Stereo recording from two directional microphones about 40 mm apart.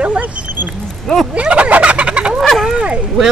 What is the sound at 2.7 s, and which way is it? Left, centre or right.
Speech, right.